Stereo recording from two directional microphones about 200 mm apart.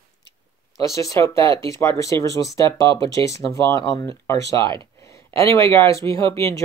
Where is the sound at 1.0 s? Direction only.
15° left (ahead or behind).